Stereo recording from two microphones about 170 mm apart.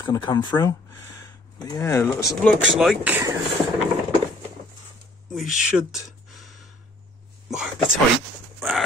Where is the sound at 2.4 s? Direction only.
5° left (ahead or behind).